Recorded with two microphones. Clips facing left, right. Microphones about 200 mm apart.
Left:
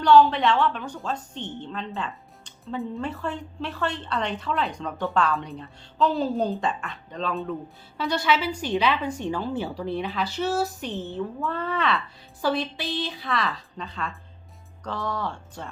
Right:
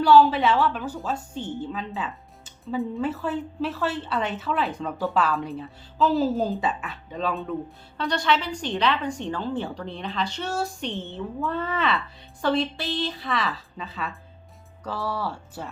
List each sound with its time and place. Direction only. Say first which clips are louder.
0.0 s a woman's voice: even; 5° right (ahead or behind)